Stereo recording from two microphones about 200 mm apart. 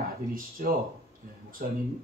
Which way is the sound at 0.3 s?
45° right (ahead or behind).